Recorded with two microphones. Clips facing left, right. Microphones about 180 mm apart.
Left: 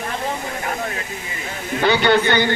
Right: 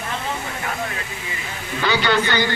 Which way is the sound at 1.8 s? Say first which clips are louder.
Left 4 dB; 55° left (ahead or behind).